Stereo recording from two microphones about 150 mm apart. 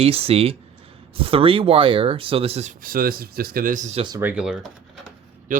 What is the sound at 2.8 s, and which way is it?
Speech, 75° right (ahead or behind).